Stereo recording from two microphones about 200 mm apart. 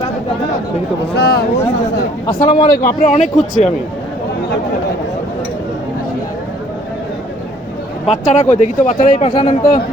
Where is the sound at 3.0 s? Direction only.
40° left (ahead or behind).